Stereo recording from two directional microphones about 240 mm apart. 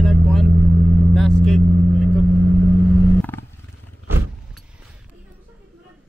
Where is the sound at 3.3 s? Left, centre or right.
Centre.